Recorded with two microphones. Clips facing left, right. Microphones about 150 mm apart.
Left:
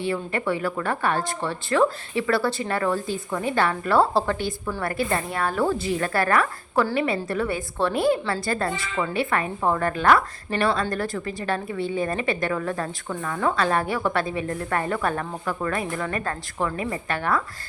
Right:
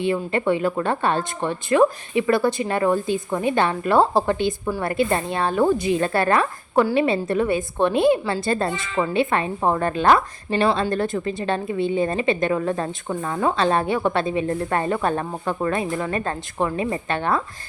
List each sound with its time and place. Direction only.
0.0 s a woman's voice: 20° right (ahead or behind)